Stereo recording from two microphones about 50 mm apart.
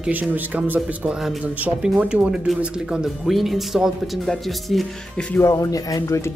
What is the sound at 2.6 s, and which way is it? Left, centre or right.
Speech, centre.